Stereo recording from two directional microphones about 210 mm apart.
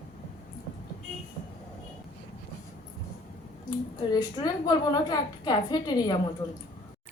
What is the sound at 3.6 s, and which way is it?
A woman's voice, 20° left (ahead or behind).